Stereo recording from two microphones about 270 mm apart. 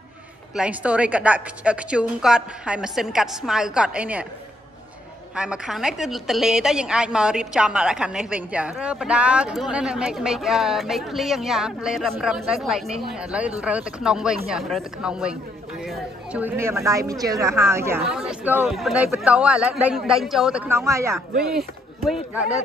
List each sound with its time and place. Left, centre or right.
0.6 s a woman's voice: centre
5.3 s a woman's voice: centre